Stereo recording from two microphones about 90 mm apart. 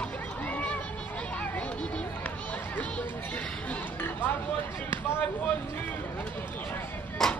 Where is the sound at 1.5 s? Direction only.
15° left (ahead or behind).